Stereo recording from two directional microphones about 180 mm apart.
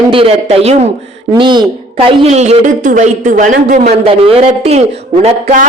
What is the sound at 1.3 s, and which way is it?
A woman's voice, 25° right (ahead or behind).